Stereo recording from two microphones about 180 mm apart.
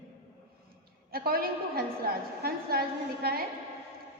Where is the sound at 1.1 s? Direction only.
55° right (ahead or behind).